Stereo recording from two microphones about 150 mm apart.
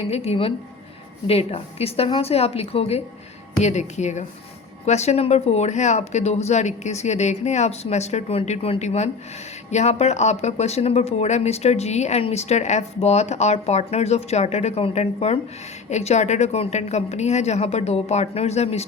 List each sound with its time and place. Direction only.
0.1 s a woman's voice: 40° left (ahead or behind)